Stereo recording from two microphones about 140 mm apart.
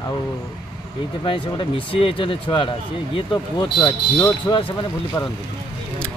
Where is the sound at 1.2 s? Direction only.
40° left (ahead or behind).